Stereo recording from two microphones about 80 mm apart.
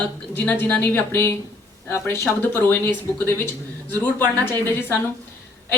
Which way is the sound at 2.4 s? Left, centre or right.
Left.